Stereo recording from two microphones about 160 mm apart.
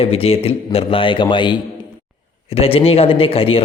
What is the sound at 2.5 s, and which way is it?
Speech, 35° left (ahead or behind).